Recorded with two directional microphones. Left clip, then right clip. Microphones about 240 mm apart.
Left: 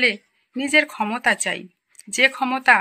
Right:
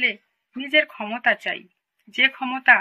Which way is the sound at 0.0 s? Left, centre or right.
Left.